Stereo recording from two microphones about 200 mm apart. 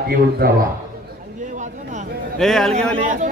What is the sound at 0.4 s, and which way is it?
Speech, 50° right (ahead or behind).